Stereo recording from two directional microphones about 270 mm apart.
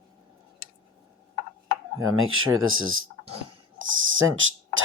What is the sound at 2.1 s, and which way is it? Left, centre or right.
Speech, right.